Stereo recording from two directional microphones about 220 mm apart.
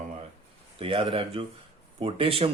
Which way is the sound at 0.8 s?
25° right (ahead or behind).